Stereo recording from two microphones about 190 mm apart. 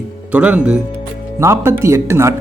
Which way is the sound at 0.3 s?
5° right (ahead or behind).